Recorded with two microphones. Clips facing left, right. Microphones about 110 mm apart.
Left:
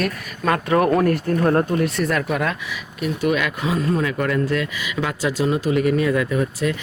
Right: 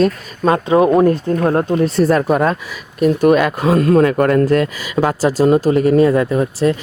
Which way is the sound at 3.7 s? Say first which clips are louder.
Right 10 dB; 65° right (ahead or behind).